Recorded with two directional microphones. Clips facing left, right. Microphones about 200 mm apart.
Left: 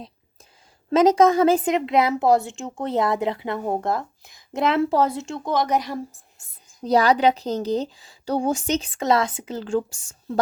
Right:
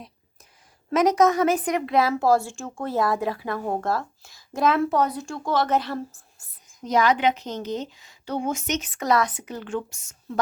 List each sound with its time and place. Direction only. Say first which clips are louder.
0.9 s a woman's voice: left 3 dB; 25° left (ahead or behind)
6.8 s a woman's voice: left 3 dB; 35° left (ahead or behind)